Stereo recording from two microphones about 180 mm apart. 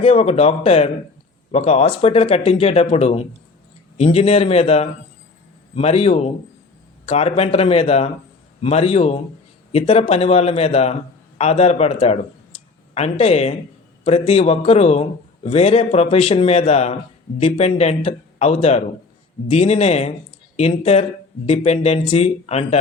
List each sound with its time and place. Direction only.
0.0 s speech: 30° left (ahead or behind)